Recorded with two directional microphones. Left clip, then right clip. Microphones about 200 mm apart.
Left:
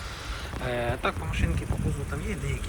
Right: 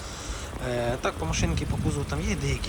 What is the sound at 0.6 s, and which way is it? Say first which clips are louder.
Speech: right 1 dB; 15° right (ahead or behind).